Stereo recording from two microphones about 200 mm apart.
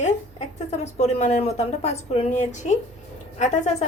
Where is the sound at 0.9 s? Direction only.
35° left (ahead or behind).